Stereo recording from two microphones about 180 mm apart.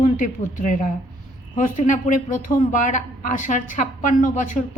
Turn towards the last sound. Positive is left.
turn(degrees=45)  # may be behind; listen again after turning